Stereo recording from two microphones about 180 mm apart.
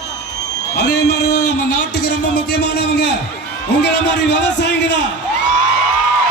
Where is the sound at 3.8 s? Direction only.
70° left (ahead or behind).